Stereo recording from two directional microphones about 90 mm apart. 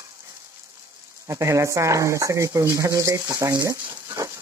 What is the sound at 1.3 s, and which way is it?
Speech, 35° right (ahead or behind).